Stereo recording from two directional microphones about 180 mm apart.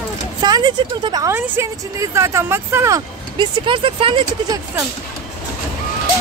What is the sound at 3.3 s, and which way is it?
Speech, 25° right (ahead or behind).